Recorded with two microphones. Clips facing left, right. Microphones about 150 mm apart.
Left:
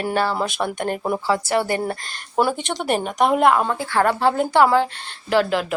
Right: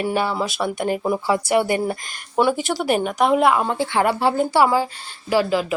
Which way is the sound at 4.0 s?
10° right (ahead or behind).